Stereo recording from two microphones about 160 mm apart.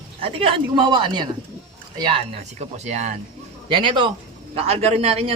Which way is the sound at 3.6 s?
30° right (ahead or behind).